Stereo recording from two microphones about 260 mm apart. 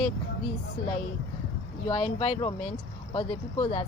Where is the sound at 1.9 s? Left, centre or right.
Left.